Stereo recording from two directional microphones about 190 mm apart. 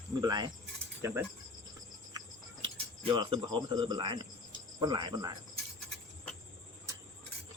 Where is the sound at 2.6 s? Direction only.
25° right (ahead or behind).